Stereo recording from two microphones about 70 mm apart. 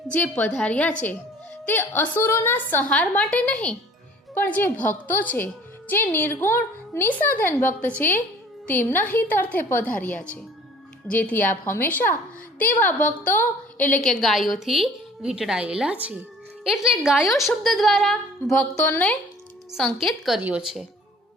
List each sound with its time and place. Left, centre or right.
0.1 s a woman's voice: left
14.0 s a woman's voice: centre
20.0 s speech: centre